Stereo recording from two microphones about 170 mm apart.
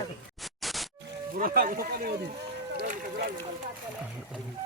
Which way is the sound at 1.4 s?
55° right (ahead or behind).